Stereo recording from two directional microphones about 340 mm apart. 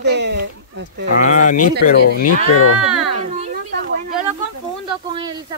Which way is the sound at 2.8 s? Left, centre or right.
Centre.